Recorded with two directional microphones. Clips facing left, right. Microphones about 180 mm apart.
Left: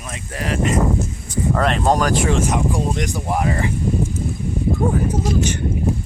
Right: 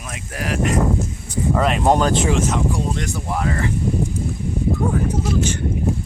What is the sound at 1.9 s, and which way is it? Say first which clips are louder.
Speech: right 2 dB; 25° right (ahead or behind).